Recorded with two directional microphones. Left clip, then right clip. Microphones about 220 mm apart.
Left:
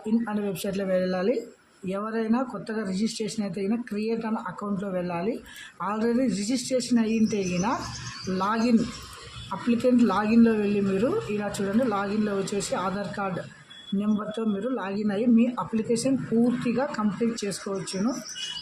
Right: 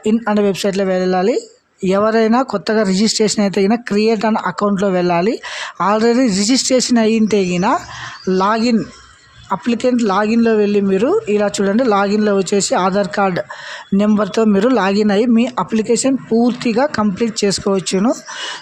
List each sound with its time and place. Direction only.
0.0 s speech: 45° right (ahead or behind)